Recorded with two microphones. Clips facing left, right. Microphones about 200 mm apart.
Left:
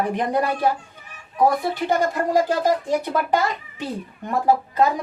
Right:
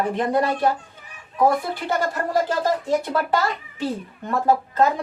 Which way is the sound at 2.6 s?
15° left (ahead or behind).